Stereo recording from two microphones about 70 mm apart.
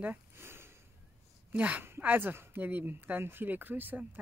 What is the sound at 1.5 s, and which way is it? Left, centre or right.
Speech, right.